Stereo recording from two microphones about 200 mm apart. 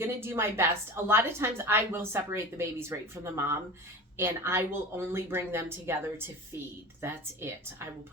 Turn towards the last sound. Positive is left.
turn(degrees=-10)  # may be behind; listen again after turning